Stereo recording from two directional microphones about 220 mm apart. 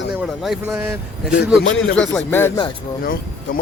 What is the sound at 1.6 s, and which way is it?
Speech, 60° left (ahead or behind).